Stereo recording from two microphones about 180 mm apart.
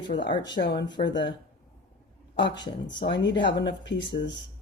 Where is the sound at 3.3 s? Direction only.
25° left (ahead or behind).